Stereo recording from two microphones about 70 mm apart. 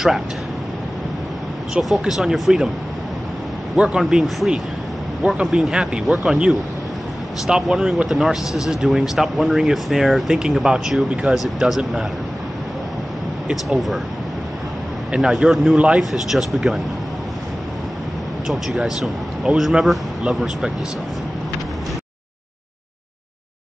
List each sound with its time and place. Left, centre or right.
1.7 s speech: centre
3.7 s speech: centre
4.0 s speech: centre
7.4 s speech: centre
13.5 s speech: centre
15.1 s speech: centre
18.5 s speech: centre